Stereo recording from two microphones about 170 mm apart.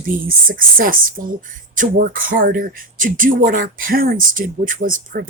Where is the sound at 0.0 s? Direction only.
55° right (ahead or behind).